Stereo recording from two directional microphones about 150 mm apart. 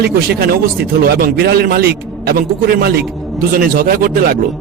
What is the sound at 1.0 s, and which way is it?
A man's voice, 90° right.